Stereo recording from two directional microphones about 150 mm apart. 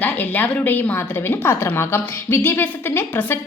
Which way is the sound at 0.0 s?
10° left (ahead or behind).